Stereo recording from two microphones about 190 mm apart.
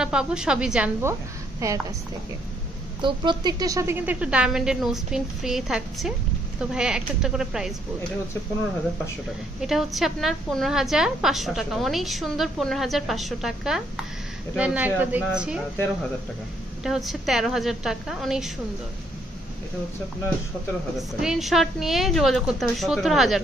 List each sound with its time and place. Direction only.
0.0 s a woman's voice: 5° right (ahead or behind)
3.0 s a woman's voice: 25° right (ahead or behind); by 7.7 s 5° right (ahead or behind)
9.6 s a woman's voice: centre (ahead or behind)
16.8 s a woman's voice: centre (ahead or behind)
21.2 s a woman's voice: centre (ahead or behind)